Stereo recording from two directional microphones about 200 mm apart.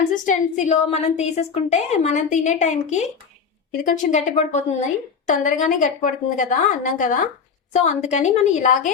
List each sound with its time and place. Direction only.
0.1 s a woman's voice: 40° left (ahead or behind)